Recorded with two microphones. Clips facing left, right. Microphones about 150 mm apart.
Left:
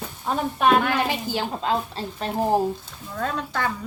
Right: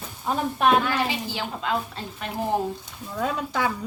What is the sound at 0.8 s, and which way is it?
Speech, 55° left (ahead or behind).